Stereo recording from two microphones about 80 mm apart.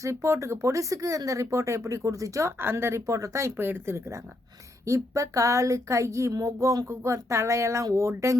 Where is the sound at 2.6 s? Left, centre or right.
Right.